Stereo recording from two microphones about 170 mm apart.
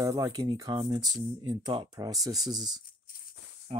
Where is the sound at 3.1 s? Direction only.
60° left (ahead or behind).